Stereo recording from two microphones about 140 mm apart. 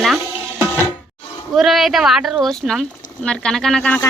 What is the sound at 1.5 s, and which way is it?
Speech, centre (ahead or behind).